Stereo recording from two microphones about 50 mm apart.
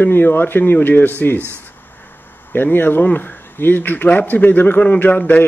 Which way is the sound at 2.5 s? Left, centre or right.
Left.